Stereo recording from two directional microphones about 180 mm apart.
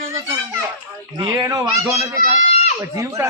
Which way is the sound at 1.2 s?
20° right (ahead or behind).